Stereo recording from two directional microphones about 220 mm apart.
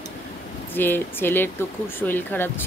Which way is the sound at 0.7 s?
10° left (ahead or behind).